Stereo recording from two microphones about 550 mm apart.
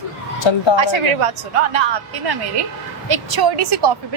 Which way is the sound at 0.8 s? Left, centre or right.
Right.